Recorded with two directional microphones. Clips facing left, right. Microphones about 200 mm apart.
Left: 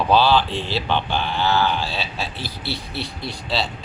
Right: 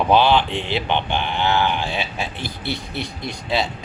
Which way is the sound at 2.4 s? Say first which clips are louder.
Right 2 dB; 50° right (ahead or behind).